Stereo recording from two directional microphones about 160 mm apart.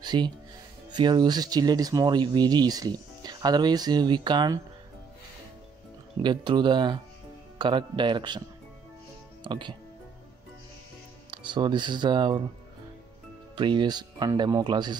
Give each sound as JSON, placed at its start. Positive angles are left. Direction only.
{"t": 0.0, "sound": "music", "side_deg": -25}
{"t": 0.9, "sound": "speech", "side_deg": -25}
{"t": 6.2, "sound": "speech", "side_deg": -30}
{"t": 9.4, "sound": "speech", "side_deg": -30}
{"t": 11.2, "sound": "speech", "side_deg": -30}
{"t": 13.6, "sound": "speech", "side_deg": -30}